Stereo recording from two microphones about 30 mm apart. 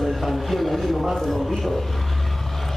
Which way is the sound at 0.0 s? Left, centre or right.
Centre.